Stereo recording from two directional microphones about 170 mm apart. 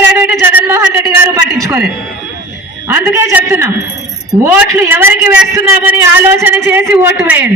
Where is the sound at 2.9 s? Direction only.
15° right (ahead or behind).